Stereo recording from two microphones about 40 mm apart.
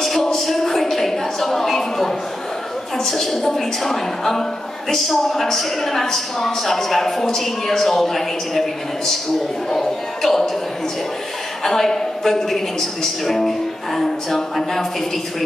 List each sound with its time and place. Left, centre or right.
0.0 s a sound: centre
3.0 s a woman's voice: centre
11.6 s a woman's voice: centre